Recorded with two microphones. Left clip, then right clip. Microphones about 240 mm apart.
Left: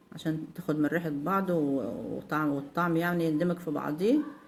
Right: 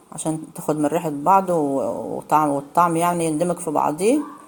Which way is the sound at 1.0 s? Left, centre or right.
Right.